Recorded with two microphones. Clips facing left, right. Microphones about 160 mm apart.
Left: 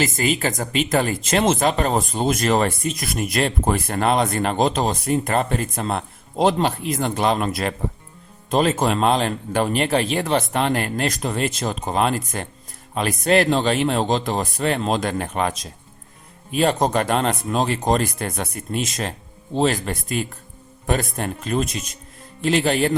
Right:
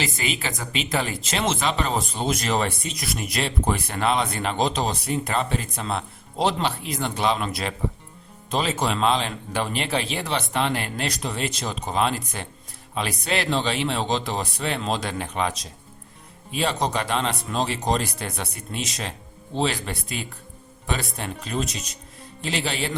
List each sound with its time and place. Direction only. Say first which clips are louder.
0.0 s speech: left 7 dB; 45° left (ahead or behind)